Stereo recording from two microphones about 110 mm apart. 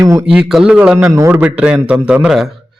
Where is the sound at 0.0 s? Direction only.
30° right (ahead or behind).